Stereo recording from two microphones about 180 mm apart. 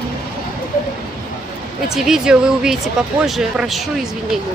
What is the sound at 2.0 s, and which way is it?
Speech, 5° right (ahead or behind).